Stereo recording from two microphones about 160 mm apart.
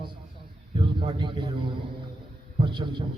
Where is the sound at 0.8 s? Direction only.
30° right (ahead or behind).